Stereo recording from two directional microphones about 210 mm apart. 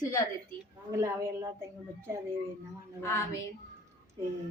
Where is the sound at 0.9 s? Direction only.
15° right (ahead or behind).